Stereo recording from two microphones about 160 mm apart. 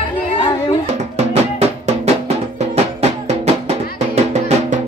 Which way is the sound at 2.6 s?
40° right (ahead or behind).